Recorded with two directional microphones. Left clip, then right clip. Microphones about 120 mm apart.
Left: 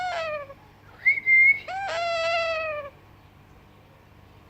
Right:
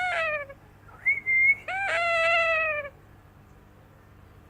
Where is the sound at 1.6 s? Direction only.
15° right (ahead or behind).